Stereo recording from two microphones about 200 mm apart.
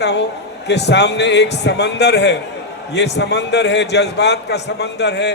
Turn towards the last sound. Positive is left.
turn(degrees=60)  # may be behind; listen again after turning